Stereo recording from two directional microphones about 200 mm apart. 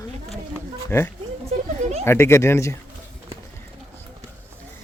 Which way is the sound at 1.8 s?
30° right (ahead or behind).